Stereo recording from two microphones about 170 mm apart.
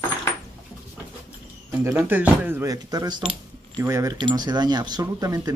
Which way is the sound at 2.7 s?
20° right (ahead or behind).